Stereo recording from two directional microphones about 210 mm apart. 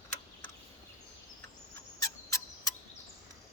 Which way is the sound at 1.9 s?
15° left (ahead or behind).